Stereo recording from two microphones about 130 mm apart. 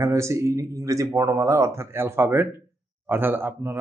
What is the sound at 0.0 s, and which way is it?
Speech, 20° right (ahead or behind).